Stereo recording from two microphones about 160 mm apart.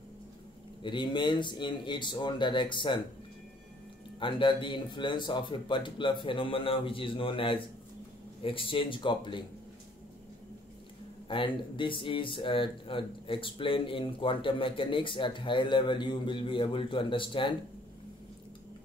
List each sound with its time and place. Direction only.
0.8 s speech: 30° left (ahead or behind)
4.2 s speech: 30° left (ahead or behind)
11.2 s speech: 30° left (ahead or behind)